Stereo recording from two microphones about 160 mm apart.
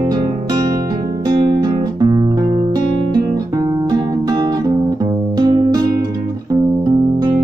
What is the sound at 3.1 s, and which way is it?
Guitar, 25° right (ahead or behind).